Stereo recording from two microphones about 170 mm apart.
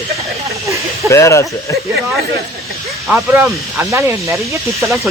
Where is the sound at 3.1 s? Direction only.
5° right (ahead or behind).